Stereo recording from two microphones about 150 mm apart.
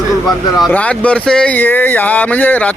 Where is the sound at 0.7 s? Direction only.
10° left (ahead or behind).